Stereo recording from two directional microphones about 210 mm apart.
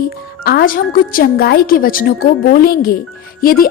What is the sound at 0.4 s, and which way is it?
Speech, 45° left (ahead or behind).